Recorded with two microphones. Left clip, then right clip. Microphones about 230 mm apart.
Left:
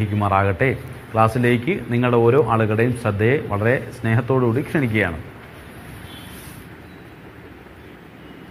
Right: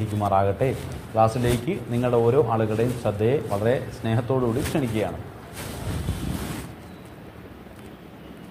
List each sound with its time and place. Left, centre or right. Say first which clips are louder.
0.2 s a man's voice: left 3 dB; left